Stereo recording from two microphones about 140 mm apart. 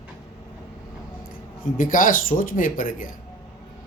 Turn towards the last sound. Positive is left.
turn(degrees=75)  # may be behind; listen again after turning